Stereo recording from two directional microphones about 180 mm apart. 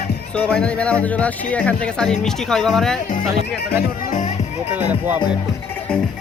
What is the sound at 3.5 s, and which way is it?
Speech, 65° left (ahead or behind).